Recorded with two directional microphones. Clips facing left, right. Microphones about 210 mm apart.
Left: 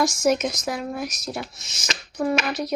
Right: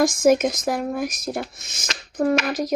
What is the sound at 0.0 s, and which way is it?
Speech, 55° right (ahead or behind).